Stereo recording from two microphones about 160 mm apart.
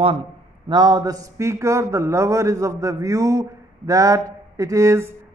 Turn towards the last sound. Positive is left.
turn(degrees=-20)  # may be behind; listen again after turning